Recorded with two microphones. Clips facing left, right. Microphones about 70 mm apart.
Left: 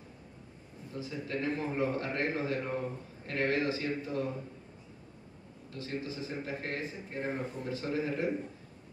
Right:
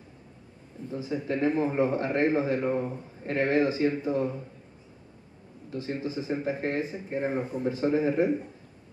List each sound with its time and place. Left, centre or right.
0.9 s a man's voice: right
5.7 s a man's voice: right